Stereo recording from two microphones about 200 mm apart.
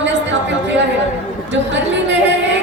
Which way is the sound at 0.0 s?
65° right (ahead or behind).